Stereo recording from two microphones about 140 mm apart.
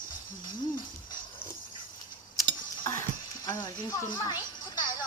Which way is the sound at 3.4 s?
25° left (ahead or behind).